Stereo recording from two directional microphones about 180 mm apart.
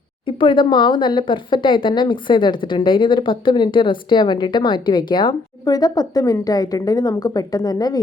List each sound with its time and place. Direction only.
0.3 s speech: 25° left (ahead or behind)